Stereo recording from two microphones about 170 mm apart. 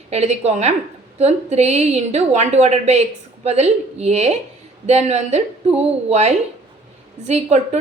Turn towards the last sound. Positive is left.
turn(degrees=-40)  # may be behind; listen again after turning